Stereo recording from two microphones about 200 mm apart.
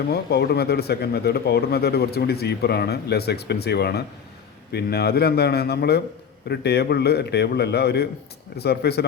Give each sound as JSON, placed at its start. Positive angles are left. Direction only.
{"t": 0.1, "sound": "speech", "side_deg": 55}